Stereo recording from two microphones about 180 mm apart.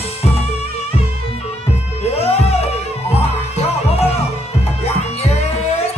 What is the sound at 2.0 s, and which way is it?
Music, 35° left (ahead or behind).